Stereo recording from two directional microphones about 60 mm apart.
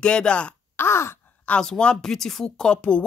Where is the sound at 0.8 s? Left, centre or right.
Left.